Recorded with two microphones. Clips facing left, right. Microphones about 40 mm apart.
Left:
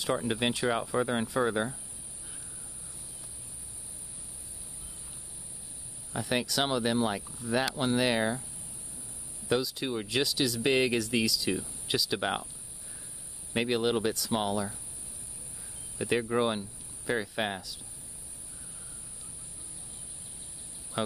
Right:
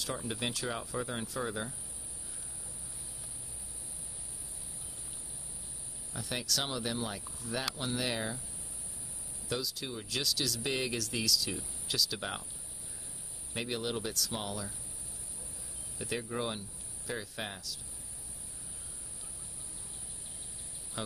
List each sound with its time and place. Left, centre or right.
0.0 s speech: left
6.1 s speech: left
9.5 s speech: left
12.2 s speech: left
13.5 s speech: left
16.0 s speech: left
20.9 s speech: centre